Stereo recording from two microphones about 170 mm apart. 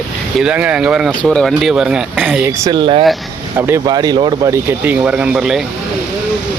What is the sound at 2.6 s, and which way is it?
Speech, 30° right (ahead or behind).